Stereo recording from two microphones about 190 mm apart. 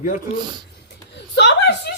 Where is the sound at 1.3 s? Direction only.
65° left (ahead or behind).